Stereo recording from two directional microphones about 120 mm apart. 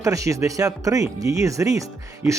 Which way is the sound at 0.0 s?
25° right (ahead or behind).